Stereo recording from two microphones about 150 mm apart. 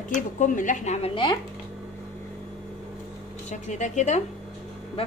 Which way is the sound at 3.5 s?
50° left (ahead or behind).